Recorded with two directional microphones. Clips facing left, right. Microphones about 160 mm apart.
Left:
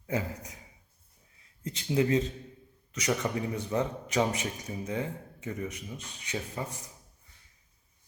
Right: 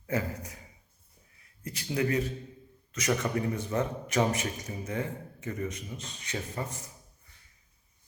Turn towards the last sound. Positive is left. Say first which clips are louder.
# right 1 dB
turn(degrees=15)  # may be behind; listen again after turning